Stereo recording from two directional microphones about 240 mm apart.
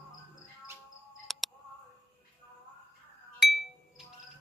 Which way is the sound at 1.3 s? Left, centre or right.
Centre.